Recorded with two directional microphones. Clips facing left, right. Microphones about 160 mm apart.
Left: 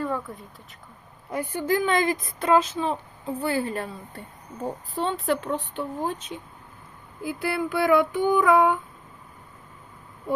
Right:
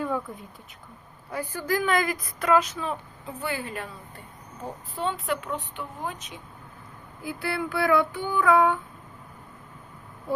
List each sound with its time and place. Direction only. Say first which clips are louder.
0.0 s a sound: even; centre (ahead or behind)
1.3 s a woman's voice: left 3 dB; 25° left (ahead or behind)
4.9 s a woman's voice: left 3 dB; 35° left (ahead or behind); by 8.8 s 20° left (ahead or behind)